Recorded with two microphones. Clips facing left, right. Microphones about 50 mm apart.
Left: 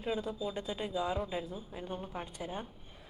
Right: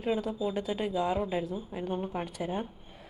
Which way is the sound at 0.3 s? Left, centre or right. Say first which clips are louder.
Right 6 dB; centre.